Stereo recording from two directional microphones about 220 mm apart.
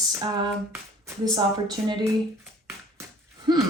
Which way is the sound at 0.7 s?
15° right (ahead or behind).